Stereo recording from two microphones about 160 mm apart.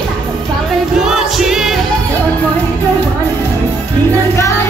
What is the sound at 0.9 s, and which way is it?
Music, centre (ahead or behind).